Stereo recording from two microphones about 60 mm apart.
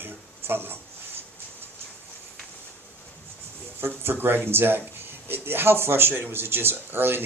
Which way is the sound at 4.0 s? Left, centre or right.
Right.